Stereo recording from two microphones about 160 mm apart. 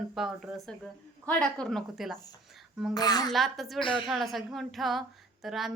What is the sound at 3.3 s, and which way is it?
A woman's voice, centre (ahead or behind).